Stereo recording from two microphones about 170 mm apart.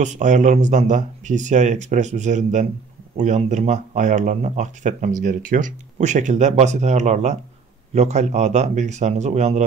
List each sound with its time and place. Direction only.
0.0 s speech: 45° right (ahead or behind)